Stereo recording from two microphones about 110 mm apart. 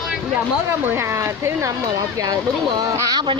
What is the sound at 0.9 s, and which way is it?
Speech, 25° right (ahead or behind).